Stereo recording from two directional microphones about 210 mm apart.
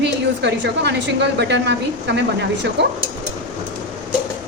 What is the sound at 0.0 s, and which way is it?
A woman's voice, 55° right (ahead or behind).